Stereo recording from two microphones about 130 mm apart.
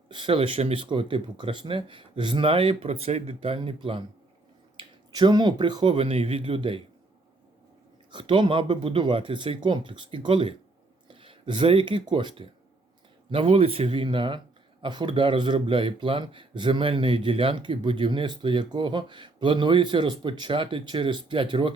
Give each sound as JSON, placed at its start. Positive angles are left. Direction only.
{"t": 0.1, "sound": "speech", "side_deg": -40}
{"t": 8.1, "sound": "speech", "side_deg": -40}